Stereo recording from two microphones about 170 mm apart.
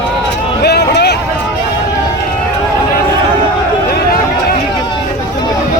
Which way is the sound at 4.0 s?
65° left (ahead or behind).